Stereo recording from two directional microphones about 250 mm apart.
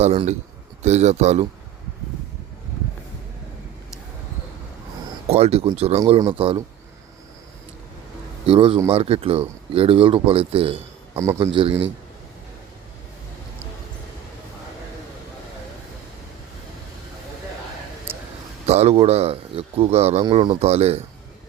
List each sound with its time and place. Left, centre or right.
0.0 s speech: right
5.3 s speech: right
8.4 s speech: right
11.1 s a man's voice: centre
11.3 s speech: right
18.6 s speech: right